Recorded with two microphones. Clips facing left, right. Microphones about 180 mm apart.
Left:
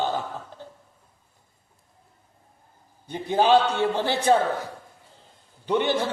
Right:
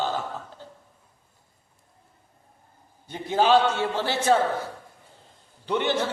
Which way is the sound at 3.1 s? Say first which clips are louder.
Left 1 dB; 15° left (ahead or behind).